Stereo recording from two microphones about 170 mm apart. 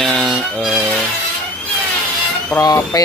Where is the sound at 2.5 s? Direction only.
20° left (ahead or behind).